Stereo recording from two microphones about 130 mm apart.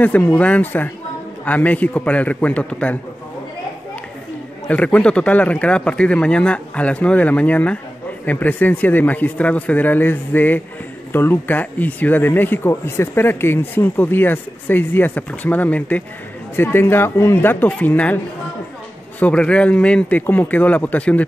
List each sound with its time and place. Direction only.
0.0 s speech: 10° left (ahead or behind)
4.6 s speech: 10° left (ahead or behind)